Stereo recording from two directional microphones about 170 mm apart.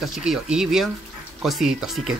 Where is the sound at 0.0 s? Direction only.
Centre (ahead or behind).